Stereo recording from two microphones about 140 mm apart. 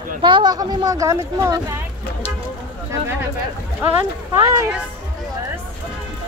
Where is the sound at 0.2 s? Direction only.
35° right (ahead or behind).